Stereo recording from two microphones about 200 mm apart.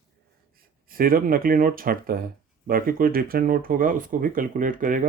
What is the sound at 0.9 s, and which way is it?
Speech, 45° right (ahead or behind).